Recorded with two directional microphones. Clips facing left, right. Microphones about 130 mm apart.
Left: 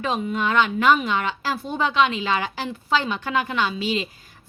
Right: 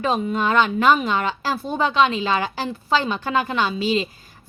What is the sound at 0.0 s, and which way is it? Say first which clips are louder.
Speech: right 3 dB; 35° right (ahead or behind).